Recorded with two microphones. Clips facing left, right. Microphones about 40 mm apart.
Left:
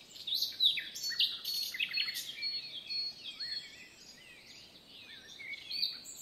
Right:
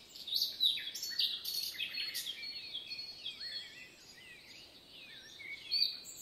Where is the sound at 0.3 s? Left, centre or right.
Left.